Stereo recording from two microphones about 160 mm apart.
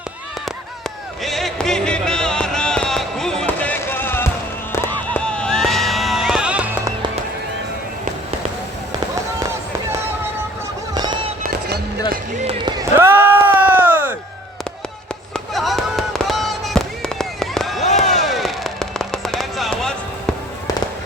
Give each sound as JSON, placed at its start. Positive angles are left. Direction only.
{"t": 1.2, "sound": "music", "side_deg": 0}
{"t": 4.7, "sound": "a sound", "side_deg": 10}
{"t": 10.9, "sound": "fireworks", "side_deg": -25}
{"t": 11.4, "sound": "music", "side_deg": -65}
{"t": 13.0, "sound": "a sound", "side_deg": -15}
{"t": 15.3, "sound": "fireworks", "side_deg": 0}